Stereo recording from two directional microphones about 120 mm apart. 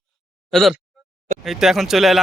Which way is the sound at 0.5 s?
Centre (ahead or behind).